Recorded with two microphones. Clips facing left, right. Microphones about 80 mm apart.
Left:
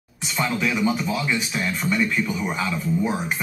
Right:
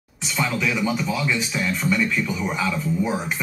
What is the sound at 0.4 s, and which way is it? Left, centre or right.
Speech, left.